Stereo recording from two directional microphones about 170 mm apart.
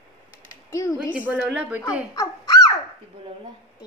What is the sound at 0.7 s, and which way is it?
Speech, 15° left (ahead or behind).